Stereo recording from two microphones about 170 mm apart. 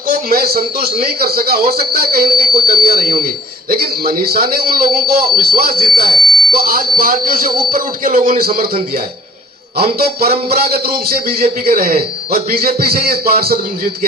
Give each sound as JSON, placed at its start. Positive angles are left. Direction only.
{"t": 0.1, "sound": "a man's voice", "side_deg": -60}
{"t": 10.0, "sound": "music", "side_deg": -65}
{"t": 10.5, "sound": "a man's voice", "side_deg": -65}